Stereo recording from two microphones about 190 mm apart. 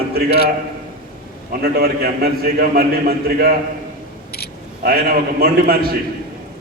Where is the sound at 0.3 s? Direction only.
55° left (ahead or behind).